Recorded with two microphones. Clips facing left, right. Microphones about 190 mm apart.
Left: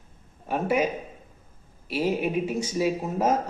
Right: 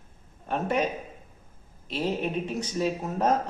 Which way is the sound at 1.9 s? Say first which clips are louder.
Left 3 dB; 10° left (ahead or behind).